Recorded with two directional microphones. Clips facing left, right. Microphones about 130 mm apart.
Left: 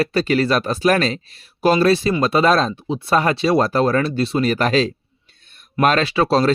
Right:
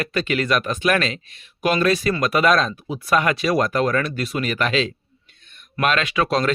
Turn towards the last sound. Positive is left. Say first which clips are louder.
# left 4 dB
turn(degrees=30)  # may be behind; listen again after turning